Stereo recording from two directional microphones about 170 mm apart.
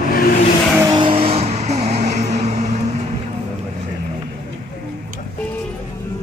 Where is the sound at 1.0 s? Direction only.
35° right (ahead or behind).